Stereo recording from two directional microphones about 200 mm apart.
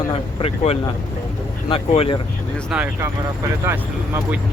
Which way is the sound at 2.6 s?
5° right (ahead or behind).